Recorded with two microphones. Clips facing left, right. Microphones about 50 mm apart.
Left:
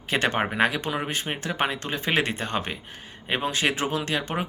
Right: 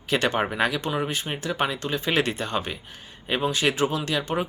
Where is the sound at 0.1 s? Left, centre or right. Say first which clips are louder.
Right 1 dB; left.